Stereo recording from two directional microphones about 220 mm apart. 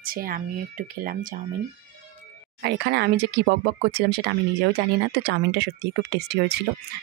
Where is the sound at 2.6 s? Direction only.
50° right (ahead or behind).